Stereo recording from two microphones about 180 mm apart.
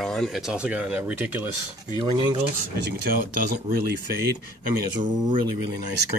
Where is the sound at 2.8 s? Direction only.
60° right (ahead or behind).